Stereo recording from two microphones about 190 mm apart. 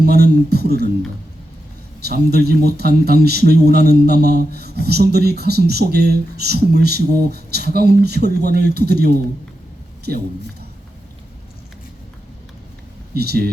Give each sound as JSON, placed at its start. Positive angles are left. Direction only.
{"t": 0.0, "sound": "a man's voice", "side_deg": -55}
{"t": 2.0, "sound": "a man's voice", "side_deg": -55}
{"t": 13.1, "sound": "a man's voice", "side_deg": -55}